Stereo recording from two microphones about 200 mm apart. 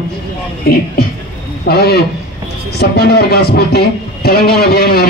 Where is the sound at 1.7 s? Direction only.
50° left (ahead or behind).